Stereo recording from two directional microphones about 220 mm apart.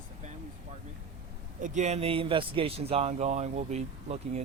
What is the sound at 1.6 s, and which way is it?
A man's voice, 30° right (ahead or behind).